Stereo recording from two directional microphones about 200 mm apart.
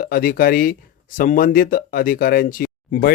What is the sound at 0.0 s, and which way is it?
Speech, 45° left (ahead or behind).